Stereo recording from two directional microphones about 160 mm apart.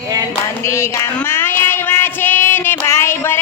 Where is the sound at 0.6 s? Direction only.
15° left (ahead or behind).